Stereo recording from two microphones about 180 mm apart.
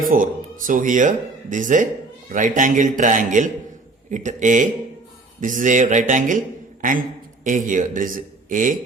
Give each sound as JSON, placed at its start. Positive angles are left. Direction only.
{"t": 0.0, "sound": "a man's voice", "side_deg": -50}
{"t": 7.4, "sound": "a man's voice", "side_deg": -45}